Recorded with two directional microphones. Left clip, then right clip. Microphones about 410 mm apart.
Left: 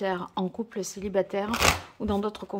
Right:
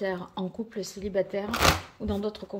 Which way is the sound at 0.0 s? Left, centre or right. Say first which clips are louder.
Left 3 dB; centre.